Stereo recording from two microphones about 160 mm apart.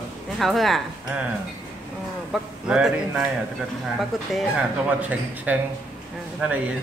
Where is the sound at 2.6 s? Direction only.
5° right (ahead or behind).